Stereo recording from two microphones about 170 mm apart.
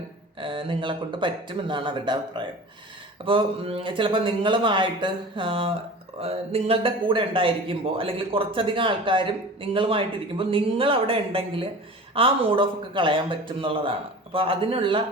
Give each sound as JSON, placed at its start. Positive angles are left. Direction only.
{"t": 0.3, "sound": "speech", "side_deg": -30}